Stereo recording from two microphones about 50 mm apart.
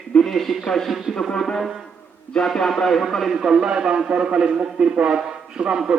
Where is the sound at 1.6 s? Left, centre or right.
Centre.